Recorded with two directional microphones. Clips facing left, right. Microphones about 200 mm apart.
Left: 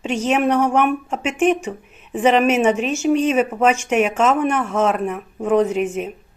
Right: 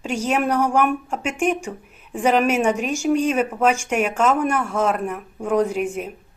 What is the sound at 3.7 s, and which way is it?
A man's voice, 10° right (ahead or behind).